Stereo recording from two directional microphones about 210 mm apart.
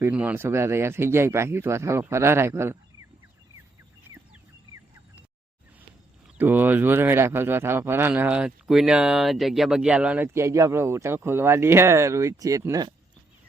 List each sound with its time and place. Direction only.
0.0 s speech: 5° right (ahead or behind)
6.3 s speech: 10° right (ahead or behind)